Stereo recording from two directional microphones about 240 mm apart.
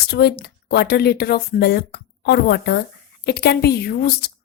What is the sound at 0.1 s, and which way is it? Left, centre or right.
Speech, left.